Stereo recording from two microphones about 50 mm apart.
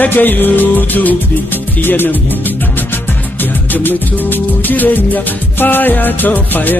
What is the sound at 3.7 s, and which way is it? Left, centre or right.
Music, left.